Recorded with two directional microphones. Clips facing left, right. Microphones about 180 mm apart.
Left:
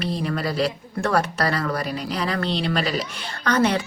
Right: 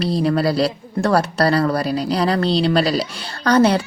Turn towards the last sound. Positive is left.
turn(degrees=-35)  # may be behind; listen again after turning